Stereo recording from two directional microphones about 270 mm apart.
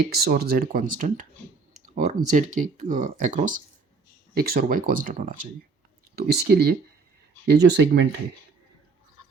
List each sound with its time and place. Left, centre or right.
0.0 s speech: right